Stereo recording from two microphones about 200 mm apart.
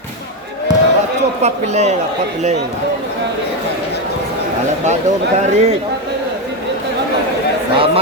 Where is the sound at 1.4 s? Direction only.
35° right (ahead or behind).